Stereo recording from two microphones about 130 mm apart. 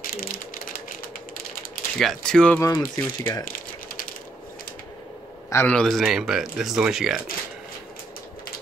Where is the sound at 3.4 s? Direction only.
90° left.